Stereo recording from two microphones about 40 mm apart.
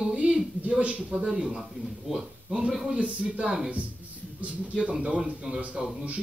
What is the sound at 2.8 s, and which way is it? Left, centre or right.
Speech, right.